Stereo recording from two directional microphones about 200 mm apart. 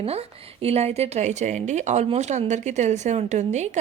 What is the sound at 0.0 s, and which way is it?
Speech, 30° right (ahead or behind).